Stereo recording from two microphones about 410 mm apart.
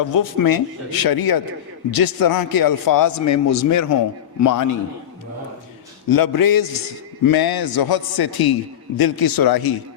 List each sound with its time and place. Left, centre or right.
0.1 s a man's voice: left
6.1 s a man's voice: left